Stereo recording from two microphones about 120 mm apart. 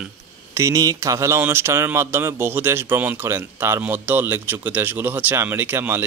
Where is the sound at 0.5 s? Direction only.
25° right (ahead or behind).